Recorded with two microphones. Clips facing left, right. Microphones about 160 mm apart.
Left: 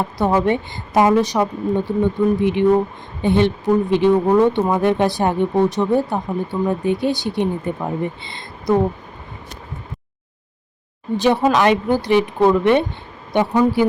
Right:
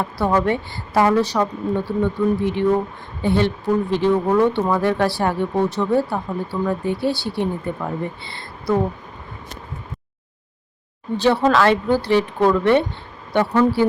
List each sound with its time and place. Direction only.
0.0 s speech: 20° left (ahead or behind)
11.2 s speech: 15° left (ahead or behind)